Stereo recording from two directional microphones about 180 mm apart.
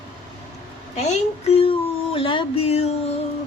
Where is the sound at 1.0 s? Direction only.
40° left (ahead or behind).